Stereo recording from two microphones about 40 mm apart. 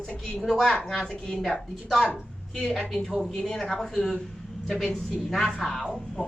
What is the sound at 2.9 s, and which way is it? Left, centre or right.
A woman's voice, centre.